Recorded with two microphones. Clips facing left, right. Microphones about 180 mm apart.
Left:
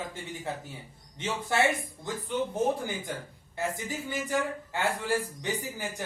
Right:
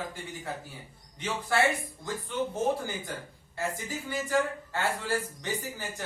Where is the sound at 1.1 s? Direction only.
20° left (ahead or behind).